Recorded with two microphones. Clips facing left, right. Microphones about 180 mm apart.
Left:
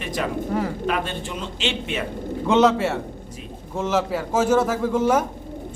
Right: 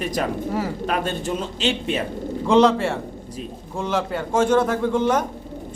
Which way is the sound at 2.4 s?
Centre (ahead or behind).